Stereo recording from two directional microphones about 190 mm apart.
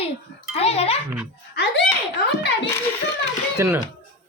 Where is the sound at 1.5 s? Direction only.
60° left (ahead or behind).